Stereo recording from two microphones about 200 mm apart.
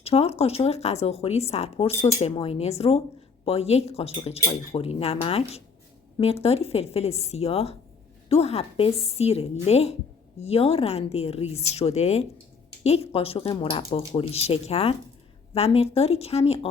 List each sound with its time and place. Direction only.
0.0 s speech: 30° left (ahead or behind)